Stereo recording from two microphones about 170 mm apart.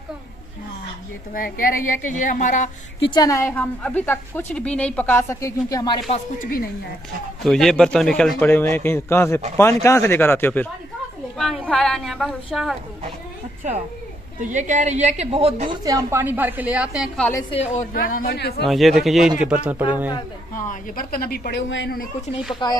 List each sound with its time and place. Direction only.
1.3 s a woman's voice: 55° left (ahead or behind)
3.0 s a woman's voice: 25° left (ahead or behind)
7.4 s a woman's voice: 5° left (ahead or behind)
11.3 s a woman's voice: centre (ahead or behind)
14.4 s a woman's voice: 45° right (ahead or behind)
15.7 s a woman's voice: 20° right (ahead or behind); by 17.1 s 5° right (ahead or behind)
17.5 s a woman's voice: 35° left (ahead or behind)
17.9 s a woman's voice: 60° left (ahead or behind)
18.6 s a woman's voice: centre (ahead or behind)
20.5 s a woman's voice: 55° left (ahead or behind); by 22.0 s 85° left
22.5 s speech: 25° left (ahead or behind)